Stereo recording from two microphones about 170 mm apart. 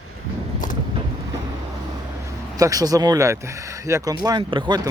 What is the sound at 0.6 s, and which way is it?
Vehicle, 55° left (ahead or behind).